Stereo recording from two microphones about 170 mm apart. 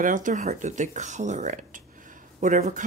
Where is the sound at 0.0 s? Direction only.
50° right (ahead or behind).